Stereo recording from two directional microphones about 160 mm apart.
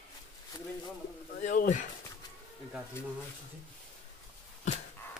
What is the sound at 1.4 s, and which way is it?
Speech, 55° left (ahead or behind).